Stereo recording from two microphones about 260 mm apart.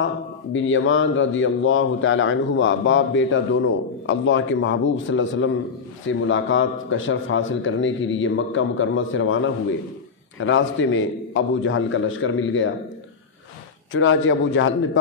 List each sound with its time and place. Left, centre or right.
0.0 s a man's voice: left
13.9 s a man's voice: left